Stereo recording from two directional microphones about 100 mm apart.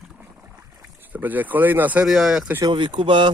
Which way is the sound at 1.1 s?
15° right (ahead or behind).